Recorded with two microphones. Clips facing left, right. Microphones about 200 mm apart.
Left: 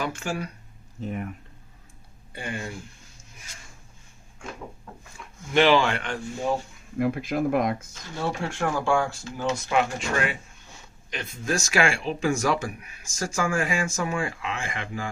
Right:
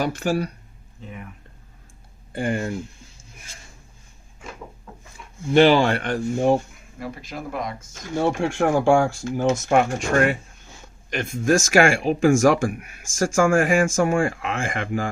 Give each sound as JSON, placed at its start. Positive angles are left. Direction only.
{"t": 0.1, "sound": "speech", "side_deg": -35}
{"t": 2.3, "sound": "speech", "side_deg": -50}
{"t": 5.5, "sound": "speech", "side_deg": -35}
{"t": 7.0, "sound": "speech", "side_deg": 55}
{"t": 8.1, "sound": "speech", "side_deg": -50}